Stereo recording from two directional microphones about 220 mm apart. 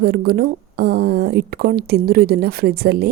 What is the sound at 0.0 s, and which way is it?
Speech, 45° right (ahead or behind).